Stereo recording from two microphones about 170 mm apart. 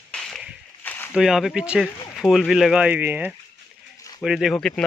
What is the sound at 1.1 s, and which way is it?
Speech, 5° right (ahead or behind).